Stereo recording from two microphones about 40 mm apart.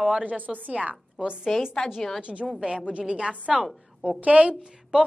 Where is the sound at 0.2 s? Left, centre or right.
Right.